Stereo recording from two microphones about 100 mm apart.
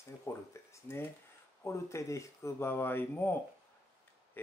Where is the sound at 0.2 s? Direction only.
30° left (ahead or behind).